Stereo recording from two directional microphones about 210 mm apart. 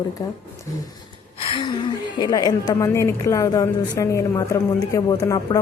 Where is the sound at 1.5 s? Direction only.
20° left (ahead or behind).